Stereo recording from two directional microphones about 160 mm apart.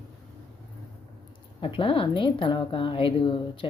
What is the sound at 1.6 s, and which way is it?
A woman's voice, 30° left (ahead or behind).